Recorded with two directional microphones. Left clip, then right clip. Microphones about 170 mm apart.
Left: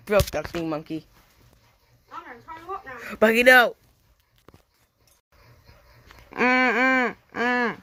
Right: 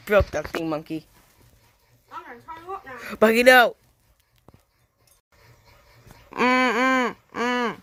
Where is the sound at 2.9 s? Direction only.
25° right (ahead or behind).